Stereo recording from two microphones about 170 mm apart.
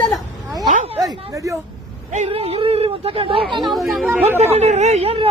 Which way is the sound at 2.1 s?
35° right (ahead or behind).